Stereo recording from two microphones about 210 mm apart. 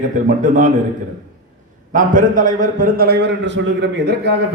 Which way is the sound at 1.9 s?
40° right (ahead or behind).